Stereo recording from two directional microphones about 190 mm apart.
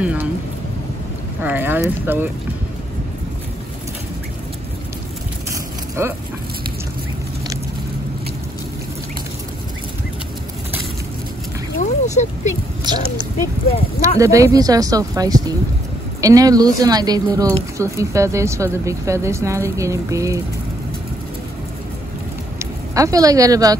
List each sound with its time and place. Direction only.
0.0 s speech: 5° right (ahead or behind)
1.4 s speech: 10° right (ahead or behind)
5.5 s a sound: 15° right (ahead or behind)
11.8 s a sound: 40° left (ahead or behind)
12.9 s speech: 20° right (ahead or behind)
14.2 s speech: 15° right (ahead or behind)
22.6 s speech: 15° right (ahead or behind)